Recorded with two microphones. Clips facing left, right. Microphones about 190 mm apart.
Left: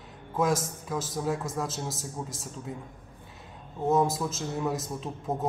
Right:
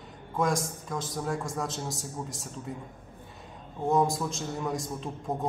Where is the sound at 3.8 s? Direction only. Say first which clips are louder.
Left 1 dB; centre (ahead or behind).